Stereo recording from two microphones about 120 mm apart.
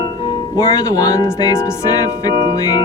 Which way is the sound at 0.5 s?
30° left (ahead or behind).